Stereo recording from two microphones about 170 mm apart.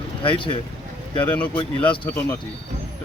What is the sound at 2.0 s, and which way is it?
Speech, 15° left (ahead or behind).